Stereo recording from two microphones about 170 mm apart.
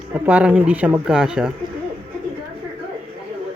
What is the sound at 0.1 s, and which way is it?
Speech, 10° right (ahead or behind).